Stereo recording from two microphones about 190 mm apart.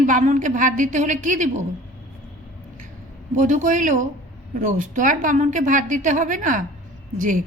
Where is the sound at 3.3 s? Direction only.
40° right (ahead or behind).